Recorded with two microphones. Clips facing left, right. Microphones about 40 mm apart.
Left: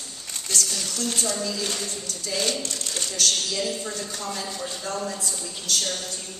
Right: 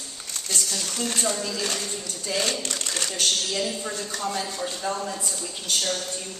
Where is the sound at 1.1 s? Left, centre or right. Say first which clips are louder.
Right 2 dB; right.